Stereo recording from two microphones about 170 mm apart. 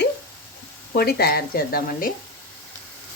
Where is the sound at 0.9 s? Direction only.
65° left (ahead or behind).